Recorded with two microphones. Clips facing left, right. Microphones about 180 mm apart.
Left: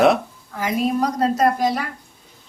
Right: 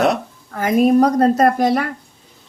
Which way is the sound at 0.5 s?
55° right (ahead or behind).